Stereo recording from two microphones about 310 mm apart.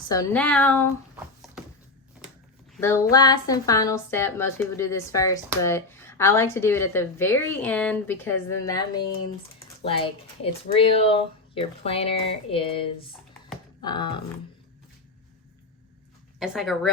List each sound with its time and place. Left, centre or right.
0.1 s speech: centre
2.7 s a woman's voice: centre
16.4 s speech: centre